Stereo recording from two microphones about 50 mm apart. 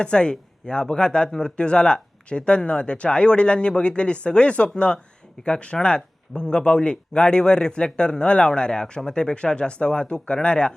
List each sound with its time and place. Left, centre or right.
0.0 s speech: centre